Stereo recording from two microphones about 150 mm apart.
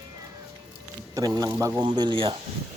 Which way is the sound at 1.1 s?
25° right (ahead or behind).